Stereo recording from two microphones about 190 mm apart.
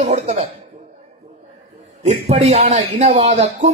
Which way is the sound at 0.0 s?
35° right (ahead or behind).